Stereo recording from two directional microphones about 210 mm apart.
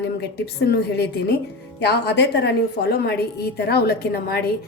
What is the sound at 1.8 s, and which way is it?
A woman's voice, 55° left (ahead or behind).